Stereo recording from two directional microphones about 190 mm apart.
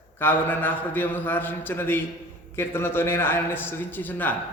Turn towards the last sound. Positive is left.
turn(degrees=10)  # may be behind; listen again after turning